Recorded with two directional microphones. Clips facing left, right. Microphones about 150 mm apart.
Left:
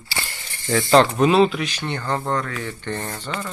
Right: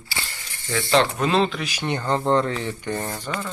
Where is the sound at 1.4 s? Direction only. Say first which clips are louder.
Left 3 dB; 5° left (ahead or behind).